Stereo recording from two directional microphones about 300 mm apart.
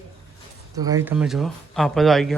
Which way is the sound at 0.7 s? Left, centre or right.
Centre.